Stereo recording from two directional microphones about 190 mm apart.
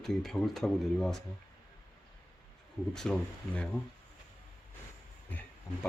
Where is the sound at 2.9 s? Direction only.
5° left (ahead or behind).